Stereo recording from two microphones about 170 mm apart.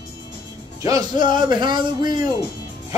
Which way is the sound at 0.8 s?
20° right (ahead or behind).